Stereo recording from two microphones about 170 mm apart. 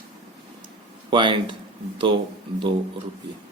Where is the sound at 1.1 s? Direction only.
30° right (ahead or behind).